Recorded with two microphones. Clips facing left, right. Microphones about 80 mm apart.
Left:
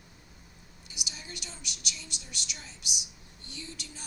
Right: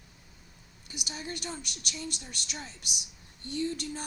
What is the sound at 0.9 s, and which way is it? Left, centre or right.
Speech, right.